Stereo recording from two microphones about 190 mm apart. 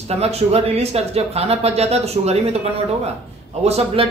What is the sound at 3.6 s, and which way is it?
Speech, 35° right (ahead or behind).